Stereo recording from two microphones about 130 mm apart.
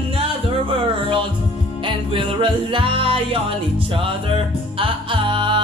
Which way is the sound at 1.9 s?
40° right (ahead or behind).